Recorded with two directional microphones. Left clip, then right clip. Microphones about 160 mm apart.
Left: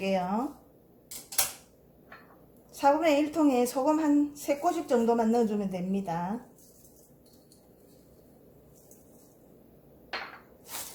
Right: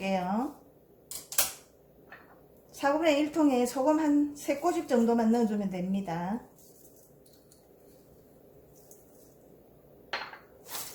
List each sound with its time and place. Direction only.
0.0 s a woman's voice: 35° left (ahead or behind)
2.7 s a woman's voice: 30° left (ahead or behind)